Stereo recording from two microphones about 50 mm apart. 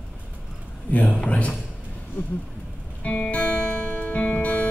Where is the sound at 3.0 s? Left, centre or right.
Left.